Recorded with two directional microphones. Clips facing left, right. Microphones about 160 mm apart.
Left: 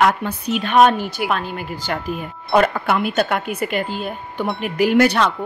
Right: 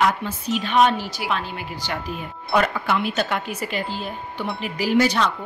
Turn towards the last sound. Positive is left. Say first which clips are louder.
# left 4 dB
turn(degrees=60)  # may be behind; listen again after turning